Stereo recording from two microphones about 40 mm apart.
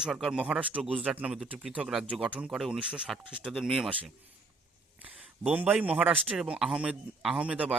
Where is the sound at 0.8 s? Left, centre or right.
Right.